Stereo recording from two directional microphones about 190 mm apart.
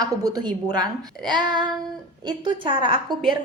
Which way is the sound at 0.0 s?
20° right (ahead or behind).